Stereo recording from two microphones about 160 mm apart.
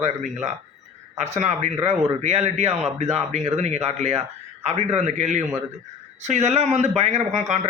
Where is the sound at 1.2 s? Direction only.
45° right (ahead or behind).